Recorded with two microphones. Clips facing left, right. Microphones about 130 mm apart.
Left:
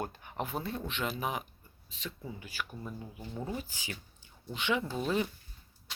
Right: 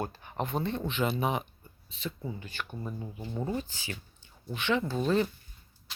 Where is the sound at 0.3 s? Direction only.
5° left (ahead or behind).